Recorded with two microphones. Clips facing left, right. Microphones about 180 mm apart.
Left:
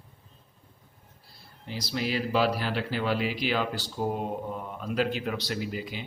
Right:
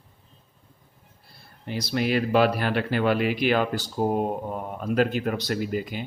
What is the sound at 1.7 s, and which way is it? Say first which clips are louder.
Speech: right 6 dB; 60° right (ahead or behind).